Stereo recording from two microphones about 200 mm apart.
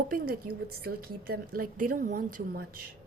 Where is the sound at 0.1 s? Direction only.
50° right (ahead or behind).